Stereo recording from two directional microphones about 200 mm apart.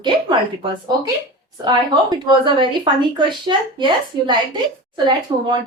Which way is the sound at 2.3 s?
25° right (ahead or behind).